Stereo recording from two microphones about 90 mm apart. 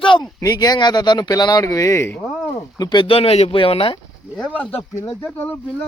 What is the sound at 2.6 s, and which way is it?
Speech, 45° left (ahead or behind).